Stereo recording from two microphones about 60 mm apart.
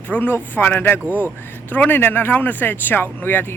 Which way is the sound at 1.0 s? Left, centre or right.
Right.